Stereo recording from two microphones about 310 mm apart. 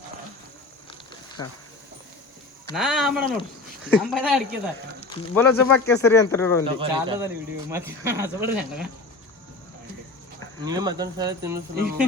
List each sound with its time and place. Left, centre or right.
2.7 s speech: centre
6.7 s speech: centre
10.7 s speech: centre